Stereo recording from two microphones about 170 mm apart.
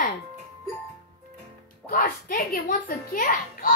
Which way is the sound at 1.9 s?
55° left (ahead or behind).